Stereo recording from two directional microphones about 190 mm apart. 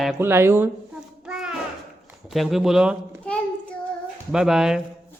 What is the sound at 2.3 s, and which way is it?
A child's voice, centre (ahead or behind).